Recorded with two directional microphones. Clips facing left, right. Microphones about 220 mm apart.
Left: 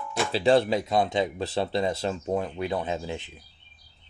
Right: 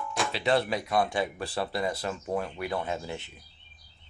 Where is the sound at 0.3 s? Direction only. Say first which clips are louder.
Left 6 dB; 30° left (ahead or behind).